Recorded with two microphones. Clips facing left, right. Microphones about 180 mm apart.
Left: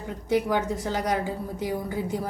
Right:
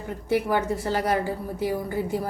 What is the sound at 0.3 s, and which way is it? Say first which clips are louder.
A woman's voice: right 1 dB; 15° left (ahead or behind).